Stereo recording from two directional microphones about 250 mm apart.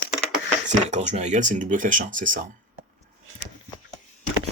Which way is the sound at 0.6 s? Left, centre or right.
Right.